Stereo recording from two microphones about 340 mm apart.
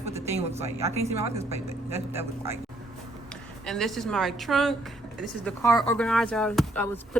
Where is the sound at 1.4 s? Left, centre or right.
Centre.